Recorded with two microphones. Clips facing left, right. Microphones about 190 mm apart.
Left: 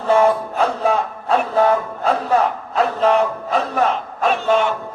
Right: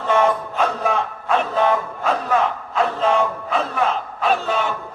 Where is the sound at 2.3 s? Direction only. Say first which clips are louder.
Left 2 dB; 35° left (ahead or behind).